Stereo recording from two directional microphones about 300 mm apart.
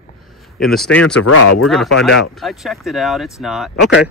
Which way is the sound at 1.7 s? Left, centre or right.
Centre.